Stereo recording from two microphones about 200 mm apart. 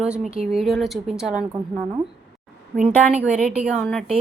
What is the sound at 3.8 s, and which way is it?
Speech, centre (ahead or behind).